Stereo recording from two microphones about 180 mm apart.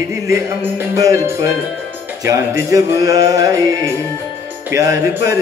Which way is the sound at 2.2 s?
20° right (ahead or behind).